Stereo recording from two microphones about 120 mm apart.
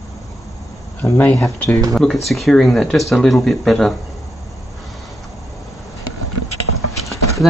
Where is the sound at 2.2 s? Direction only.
Centre (ahead or behind).